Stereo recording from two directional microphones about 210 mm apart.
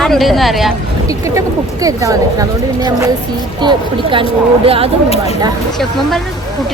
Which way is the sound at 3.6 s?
25° right (ahead or behind).